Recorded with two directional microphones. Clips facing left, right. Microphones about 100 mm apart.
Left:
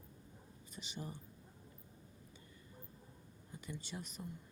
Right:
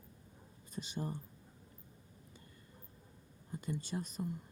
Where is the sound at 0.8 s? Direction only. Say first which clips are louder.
Right 7 dB; 45° right (ahead or behind).